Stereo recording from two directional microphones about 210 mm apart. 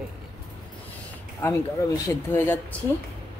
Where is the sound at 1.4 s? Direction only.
10° left (ahead or behind).